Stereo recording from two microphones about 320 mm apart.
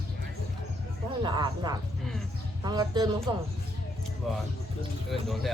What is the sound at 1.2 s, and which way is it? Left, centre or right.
A woman's voice, centre.